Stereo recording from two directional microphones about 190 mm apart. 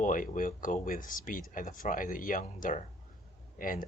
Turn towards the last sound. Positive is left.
turn(degrees=45)  # may be behind; listen again after turning